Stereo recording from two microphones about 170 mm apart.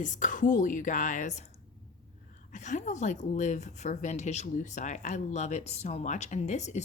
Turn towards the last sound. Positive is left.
turn(degrees=45)  # may be behind; listen again after turning